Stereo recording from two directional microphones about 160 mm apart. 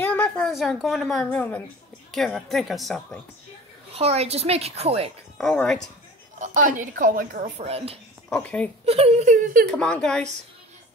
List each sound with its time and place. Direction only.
0.0 s a woman's voice: 10° left (ahead or behind)
3.9 s a woman's voice: 40° right (ahead or behind)
5.4 s a woman's voice: 5° left (ahead or behind)
6.4 s a woman's voice: 55° right (ahead or behind)
7.5 s a woman's voice: 40° right (ahead or behind)
8.3 s a woman's voice: 10° left (ahead or behind)
8.8 s speech: 40° right (ahead or behind)
9.7 s a woman's voice: 5° left (ahead or behind)